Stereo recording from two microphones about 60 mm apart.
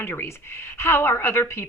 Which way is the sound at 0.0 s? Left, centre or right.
Left.